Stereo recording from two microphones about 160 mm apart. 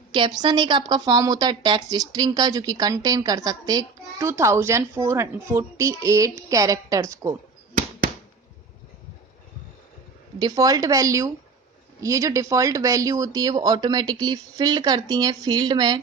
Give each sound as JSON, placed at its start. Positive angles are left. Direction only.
{"t": 0.1, "sound": "speech", "side_deg": -30}
{"t": 10.3, "sound": "speech", "side_deg": -25}